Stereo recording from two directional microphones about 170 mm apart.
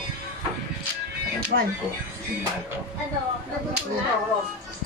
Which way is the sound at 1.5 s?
90° right.